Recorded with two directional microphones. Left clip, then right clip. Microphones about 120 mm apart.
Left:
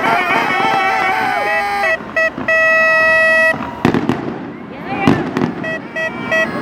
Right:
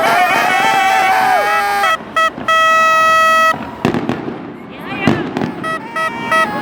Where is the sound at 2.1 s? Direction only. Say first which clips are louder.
Right 1 dB; 25° right (ahead or behind).